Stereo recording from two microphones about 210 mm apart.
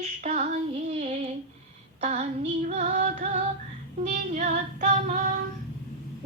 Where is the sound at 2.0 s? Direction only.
35° right (ahead or behind).